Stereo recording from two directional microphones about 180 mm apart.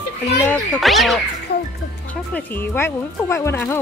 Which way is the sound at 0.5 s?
Centre (ahead or behind).